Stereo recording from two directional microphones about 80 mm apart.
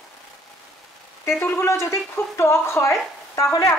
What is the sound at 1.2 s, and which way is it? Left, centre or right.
A woman's voice, left.